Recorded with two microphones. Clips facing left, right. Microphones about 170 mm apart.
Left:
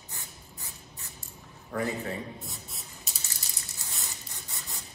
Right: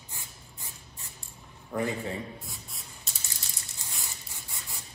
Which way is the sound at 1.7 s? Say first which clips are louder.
Right 1 dB; 15° right (ahead or behind).